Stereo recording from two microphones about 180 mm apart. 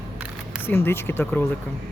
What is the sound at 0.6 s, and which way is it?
Speech, 10° left (ahead or behind).